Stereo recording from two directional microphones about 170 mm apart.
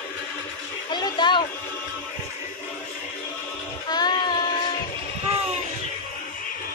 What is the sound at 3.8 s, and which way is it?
Child singing, 25° left (ahead or behind).